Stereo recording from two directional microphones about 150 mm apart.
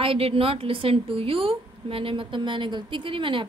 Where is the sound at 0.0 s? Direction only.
35° right (ahead or behind).